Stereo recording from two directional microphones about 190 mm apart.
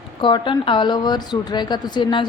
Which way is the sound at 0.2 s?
25° left (ahead or behind).